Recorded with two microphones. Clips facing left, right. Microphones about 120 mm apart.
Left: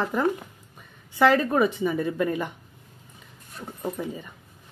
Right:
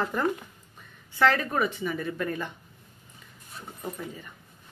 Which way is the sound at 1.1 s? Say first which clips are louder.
Left 4 dB; 15° left (ahead or behind).